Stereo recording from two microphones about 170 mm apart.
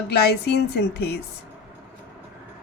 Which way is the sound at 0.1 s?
70° left (ahead or behind).